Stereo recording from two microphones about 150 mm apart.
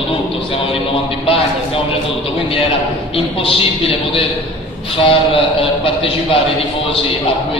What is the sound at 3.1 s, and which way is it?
A man's voice, 35° left (ahead or behind).